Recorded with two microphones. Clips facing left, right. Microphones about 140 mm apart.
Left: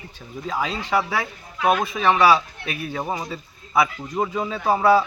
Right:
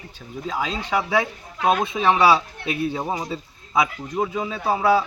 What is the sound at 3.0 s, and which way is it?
Speech, 15° right (ahead or behind).